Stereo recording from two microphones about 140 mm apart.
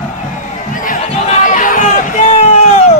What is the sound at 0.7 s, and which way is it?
Crowd, 70° left (ahead or behind).